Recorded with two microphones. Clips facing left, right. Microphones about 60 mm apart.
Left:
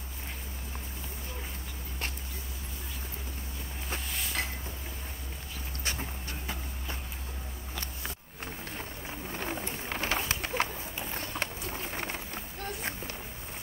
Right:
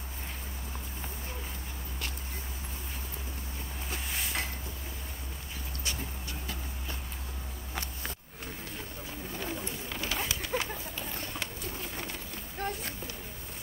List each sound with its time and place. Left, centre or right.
5.9 s vehicle: left
9.3 s bird: left
12.6 s a sound: right